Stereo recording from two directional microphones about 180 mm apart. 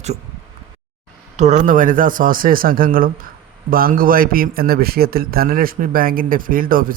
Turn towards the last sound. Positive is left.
turn(degrees=-50)  # may be behind; listen again after turning